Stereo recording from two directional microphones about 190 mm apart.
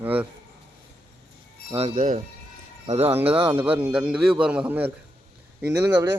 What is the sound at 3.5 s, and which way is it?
A man's voice, 10° right (ahead or behind).